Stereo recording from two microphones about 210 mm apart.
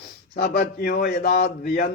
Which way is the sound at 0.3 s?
50° left (ahead or behind).